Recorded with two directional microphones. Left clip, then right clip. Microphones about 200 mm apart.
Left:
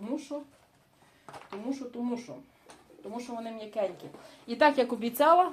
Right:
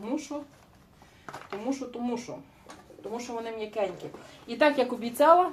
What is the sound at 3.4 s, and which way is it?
Speech, 40° left (ahead or behind).